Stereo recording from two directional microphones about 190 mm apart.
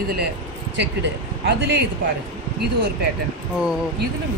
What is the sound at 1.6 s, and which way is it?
Speech, 65° right (ahead or behind).